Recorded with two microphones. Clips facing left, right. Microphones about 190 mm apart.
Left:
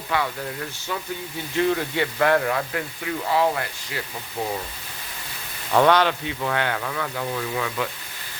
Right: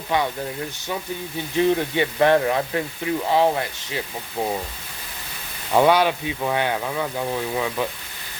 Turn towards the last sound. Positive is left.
turn(degrees=-20)  # may be behind; listen again after turning